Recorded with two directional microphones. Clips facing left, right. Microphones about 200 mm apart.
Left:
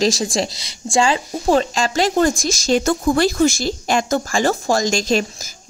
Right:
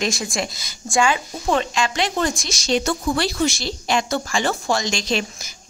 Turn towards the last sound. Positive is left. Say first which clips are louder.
# left 5 dB
turn(degrees=45)  # may be behind; listen again after turning